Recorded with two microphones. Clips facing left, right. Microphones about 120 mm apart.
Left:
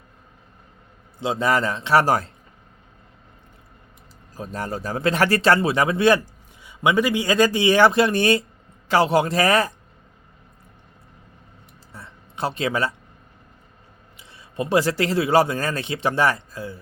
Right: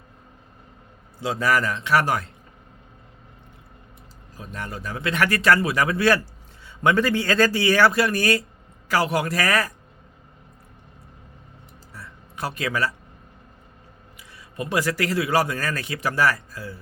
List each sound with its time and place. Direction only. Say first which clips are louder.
1.2 s speech: left 1 dB; 25° left (ahead or behind)
4.4 s speech: left 5 dB; 35° left (ahead or behind)
11.9 s a sound: left 3 dB; 25° left (ahead or behind)
14.2 s speech: left 4 dB; 25° left (ahead or behind)